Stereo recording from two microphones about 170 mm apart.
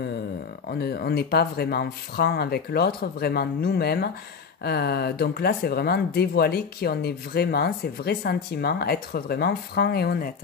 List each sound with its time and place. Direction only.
0.7 s speech: 65° left (ahead or behind)